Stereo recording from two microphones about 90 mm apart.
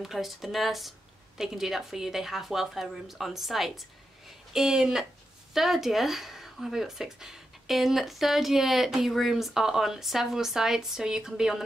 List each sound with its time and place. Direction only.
0.0 s speech: centre (ahead or behind)